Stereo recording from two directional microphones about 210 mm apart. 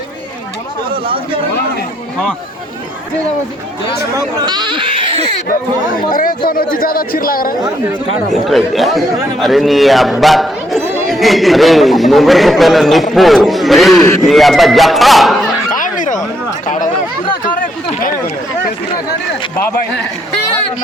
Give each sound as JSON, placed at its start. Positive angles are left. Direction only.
{"t": 1.0, "sound": "speech", "side_deg": -25}
{"t": 4.1, "sound": "speech", "side_deg": -20}
{"t": 6.1, "sound": "speech", "side_deg": 40}
{"t": 8.3, "sound": "speech", "side_deg": 0}
{"t": 15.7, "sound": "a sound", "side_deg": 40}
{"t": 17.4, "sound": "a sound", "side_deg": 40}